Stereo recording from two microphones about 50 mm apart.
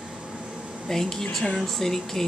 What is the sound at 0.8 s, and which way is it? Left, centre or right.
Speech, centre.